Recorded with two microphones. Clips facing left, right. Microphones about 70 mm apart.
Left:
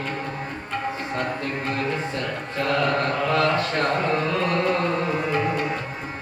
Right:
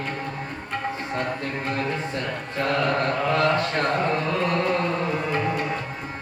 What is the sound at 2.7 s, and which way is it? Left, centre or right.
Mantra, centre.